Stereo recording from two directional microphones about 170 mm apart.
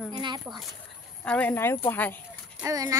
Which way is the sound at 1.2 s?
10° left (ahead or behind).